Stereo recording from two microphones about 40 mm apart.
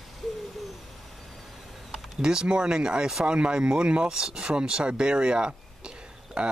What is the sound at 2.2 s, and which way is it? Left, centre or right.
Speech, right.